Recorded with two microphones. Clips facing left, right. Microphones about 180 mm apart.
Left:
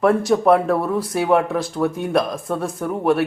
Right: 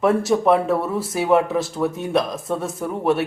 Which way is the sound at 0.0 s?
Centre (ahead or behind).